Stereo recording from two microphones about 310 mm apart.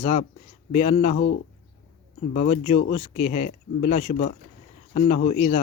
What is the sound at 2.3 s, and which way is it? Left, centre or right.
Speech, left.